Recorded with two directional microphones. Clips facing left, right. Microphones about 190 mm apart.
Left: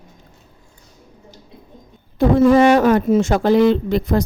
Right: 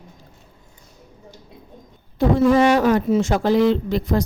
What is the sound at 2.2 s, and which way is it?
Speech, 55° left (ahead or behind).